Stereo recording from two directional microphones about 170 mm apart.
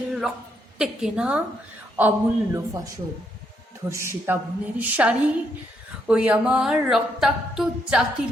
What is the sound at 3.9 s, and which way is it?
A woman's voice, 15° right (ahead or behind).